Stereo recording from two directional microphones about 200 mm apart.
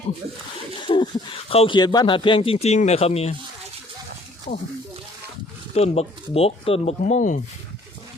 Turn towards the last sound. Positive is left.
turn(degrees=40)  # may be behind; listen again after turning